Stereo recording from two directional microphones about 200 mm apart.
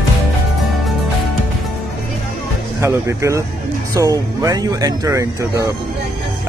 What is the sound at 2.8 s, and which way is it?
Speech, 15° right (ahead or behind).